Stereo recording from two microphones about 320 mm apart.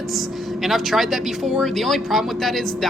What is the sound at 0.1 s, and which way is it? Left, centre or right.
Speech, centre.